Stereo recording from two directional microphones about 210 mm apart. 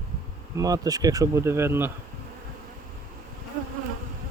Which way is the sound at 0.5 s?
15° right (ahead or behind).